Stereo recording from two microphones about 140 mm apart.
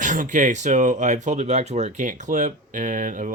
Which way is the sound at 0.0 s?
65° right (ahead or behind).